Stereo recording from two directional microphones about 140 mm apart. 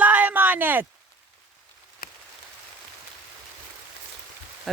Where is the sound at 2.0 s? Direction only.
90° left.